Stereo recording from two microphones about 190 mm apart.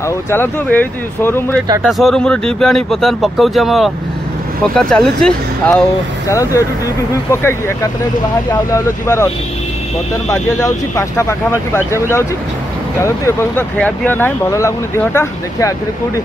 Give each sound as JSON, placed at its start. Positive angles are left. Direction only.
{"t": 0.3, "sound": "speech", "side_deg": 10}
{"t": 6.2, "sound": "speech", "side_deg": 15}
{"t": 10.3, "sound": "speech", "side_deg": 15}